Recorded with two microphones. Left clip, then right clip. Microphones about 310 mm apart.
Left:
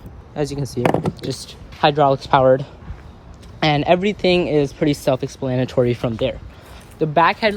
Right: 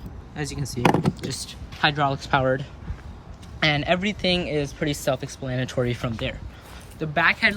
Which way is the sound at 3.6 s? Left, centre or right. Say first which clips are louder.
Left 6 dB; centre.